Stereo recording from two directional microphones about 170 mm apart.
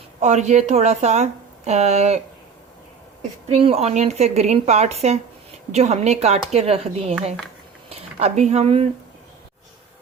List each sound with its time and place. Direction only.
0.2 s speech: 45° right (ahead or behind)
3.5 s speech: 35° right (ahead or behind)